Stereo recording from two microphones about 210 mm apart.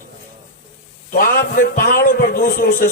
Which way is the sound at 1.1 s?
40° left (ahead or behind).